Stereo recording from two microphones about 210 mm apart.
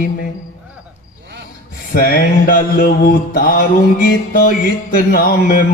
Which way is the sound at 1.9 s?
45° left (ahead or behind).